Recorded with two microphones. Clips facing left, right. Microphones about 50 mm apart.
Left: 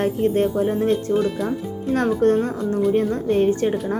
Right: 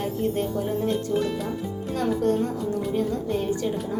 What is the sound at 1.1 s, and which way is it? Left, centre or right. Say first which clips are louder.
Speech: left 5 dB; centre.